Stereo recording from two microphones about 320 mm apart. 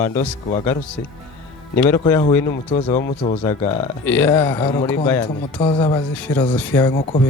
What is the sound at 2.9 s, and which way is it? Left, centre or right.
Speech, left.